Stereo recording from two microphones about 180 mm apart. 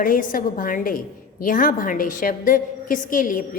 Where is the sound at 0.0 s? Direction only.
50° left (ahead or behind).